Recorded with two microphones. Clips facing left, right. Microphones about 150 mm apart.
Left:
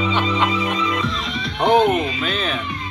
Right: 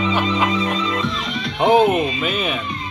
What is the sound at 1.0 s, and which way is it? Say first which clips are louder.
Music: right 1 dB; centre (ahead or behind).